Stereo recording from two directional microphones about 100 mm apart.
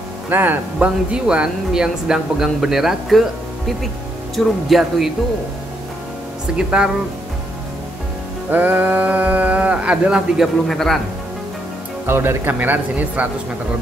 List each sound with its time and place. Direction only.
0.3 s speech: 20° right (ahead or behind); by 5.1 s centre (ahead or behind)
6.5 s speech: 10° right (ahead or behind)
8.5 s speech: 20° right (ahead or behind); by 11.0 s 5° left (ahead or behind)
12.1 s speech: 25° right (ahead or behind)